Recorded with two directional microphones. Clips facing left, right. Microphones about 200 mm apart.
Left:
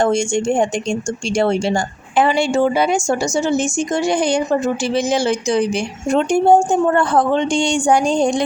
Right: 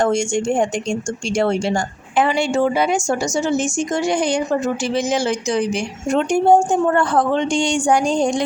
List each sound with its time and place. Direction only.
0.0 s a woman's voice: 25° left (ahead or behind)